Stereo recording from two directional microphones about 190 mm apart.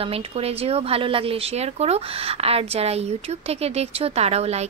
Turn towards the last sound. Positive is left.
turn(degrees=-35)  # may be behind; listen again after turning